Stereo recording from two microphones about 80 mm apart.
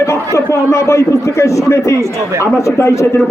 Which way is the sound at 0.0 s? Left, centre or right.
Left.